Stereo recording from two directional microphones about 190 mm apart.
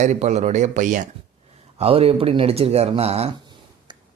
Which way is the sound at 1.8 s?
30° right (ahead or behind).